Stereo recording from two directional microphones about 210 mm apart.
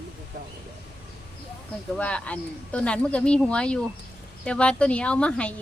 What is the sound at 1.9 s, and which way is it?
Speech, 5° left (ahead or behind).